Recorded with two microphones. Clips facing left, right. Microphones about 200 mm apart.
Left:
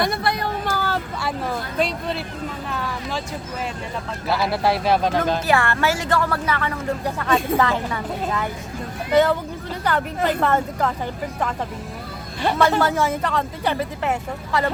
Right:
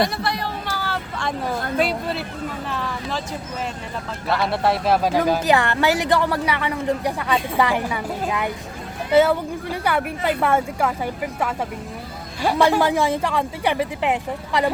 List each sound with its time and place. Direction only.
0.0 s a sound: 50° left (ahead or behind)
1.8 s speech: 5° right (ahead or behind)
4.3 s a woman's voice: centre (ahead or behind); by 14.7 s 15° right (ahead or behind)